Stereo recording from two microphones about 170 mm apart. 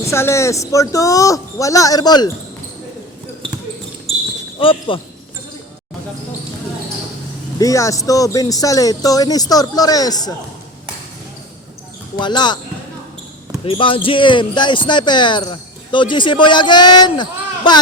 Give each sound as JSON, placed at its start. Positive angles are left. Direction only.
{"t": 0.1, "sound": "speech", "side_deg": 15}
{"t": 4.6, "sound": "speech", "side_deg": 30}
{"t": 7.6, "sound": "speech", "side_deg": 20}
{"t": 12.1, "sound": "speech", "side_deg": 25}
{"t": 13.7, "sound": "speech", "side_deg": 30}